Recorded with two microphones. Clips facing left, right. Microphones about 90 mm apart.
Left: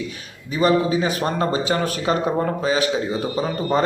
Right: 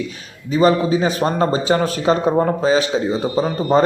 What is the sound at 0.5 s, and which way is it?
A man's voice, 30° right (ahead or behind).